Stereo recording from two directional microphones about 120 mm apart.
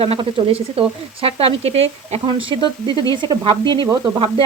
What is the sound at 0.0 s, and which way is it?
Speech, 50° right (ahead or behind).